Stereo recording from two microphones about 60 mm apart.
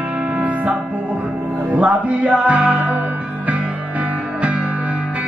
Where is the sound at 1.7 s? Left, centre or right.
Right.